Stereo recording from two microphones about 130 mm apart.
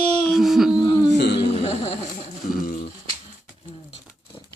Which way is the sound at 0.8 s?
35° left (ahead or behind).